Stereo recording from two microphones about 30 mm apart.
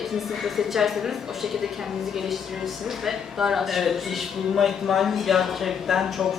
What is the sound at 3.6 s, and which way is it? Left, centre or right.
A man's voice, centre.